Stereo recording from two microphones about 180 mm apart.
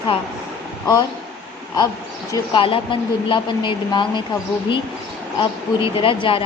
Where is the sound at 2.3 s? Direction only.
25° left (ahead or behind).